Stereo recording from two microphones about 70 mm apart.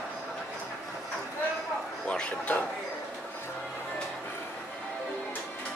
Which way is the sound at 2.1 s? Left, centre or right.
Centre.